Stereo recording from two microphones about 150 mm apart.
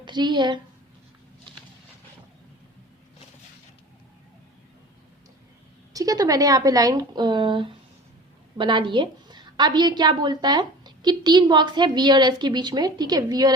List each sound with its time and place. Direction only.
0.0 s a woman's voice: 30° right (ahead or behind)
5.9 s a woman's voice: 25° right (ahead or behind)